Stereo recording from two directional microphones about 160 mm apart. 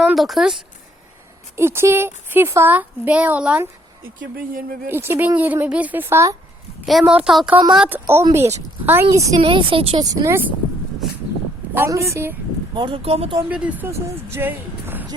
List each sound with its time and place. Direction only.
0.0 s a woman's voice: centre (ahead or behind)
1.5 s a woman's voice: 15° right (ahead or behind)
4.4 s speech: 65° right (ahead or behind)
4.9 s a woman's voice: 15° right (ahead or behind)
6.8 s a woman's voice: 5° right (ahead or behind); by 9.3 s 20° right (ahead or behind)
9.4 s speech: 35° right (ahead or behind); by 10.5 s 15° right (ahead or behind)
11.7 s a woman's voice: 15° right (ahead or behind)
12.7 s speech: 30° right (ahead or behind)
13.5 s a woman's voice: 10° right (ahead or behind)
14.3 s a sound: 15° right (ahead or behind)